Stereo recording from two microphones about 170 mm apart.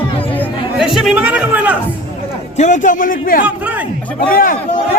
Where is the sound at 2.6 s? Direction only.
50° left (ahead or behind).